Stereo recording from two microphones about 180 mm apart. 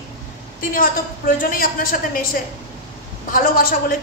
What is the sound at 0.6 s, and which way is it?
A woman's voice, 50° left (ahead or behind).